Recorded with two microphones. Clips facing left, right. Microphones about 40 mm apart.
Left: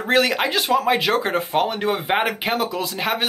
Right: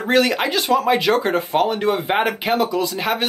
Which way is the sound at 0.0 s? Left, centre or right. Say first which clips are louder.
Right 1 dB; centre.